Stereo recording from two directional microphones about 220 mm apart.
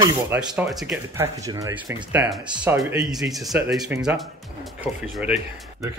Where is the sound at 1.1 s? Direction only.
15° right (ahead or behind).